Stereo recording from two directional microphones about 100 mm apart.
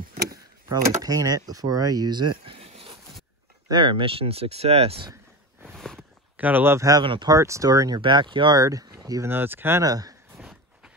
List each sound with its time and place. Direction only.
0.7 s speech: 40° right (ahead or behind); by 3.0 s 70° right (ahead or behind)
3.6 s speech: 50° right (ahead or behind); by 5.0 s 85° right
5.7 s a sound: 5° left (ahead or behind)
6.3 s speech: 15° right (ahead or behind)
7.0 s speech: 50° right (ahead or behind)
7.3 s speech: 30° right (ahead or behind)
8.0 s speech: 50° right (ahead or behind); by 9.3 s 35° right (ahead or behind)
9.3 s speech: 20° right (ahead or behind)
9.8 s speech: 40° right (ahead or behind)
10.3 s a sound: 5° right (ahead or behind)